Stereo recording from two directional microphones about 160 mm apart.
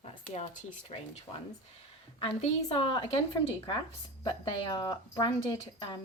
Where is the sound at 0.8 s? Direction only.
40° left (ahead or behind).